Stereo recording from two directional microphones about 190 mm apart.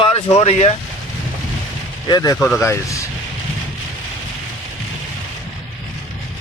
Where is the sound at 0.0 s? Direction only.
30° left (ahead or behind).